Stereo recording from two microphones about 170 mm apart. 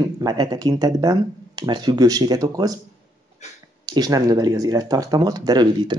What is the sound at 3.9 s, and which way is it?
Speech, 20° right (ahead or behind).